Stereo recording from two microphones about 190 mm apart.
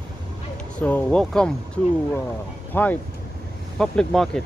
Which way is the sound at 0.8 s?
10° left (ahead or behind).